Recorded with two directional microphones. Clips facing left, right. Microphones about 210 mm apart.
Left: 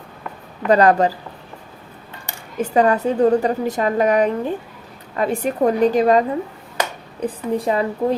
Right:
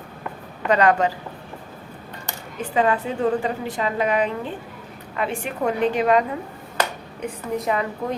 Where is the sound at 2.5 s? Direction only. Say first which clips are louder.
Left 5 dB; 40° left (ahead or behind).